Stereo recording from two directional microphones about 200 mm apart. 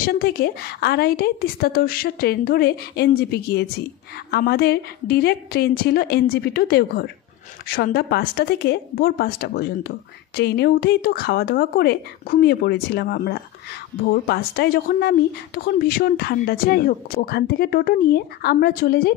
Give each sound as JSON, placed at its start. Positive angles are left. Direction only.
{"t": 0.0, "sound": "speech", "side_deg": 50}